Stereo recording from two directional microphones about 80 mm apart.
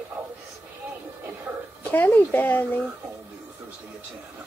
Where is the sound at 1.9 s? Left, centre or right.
Left.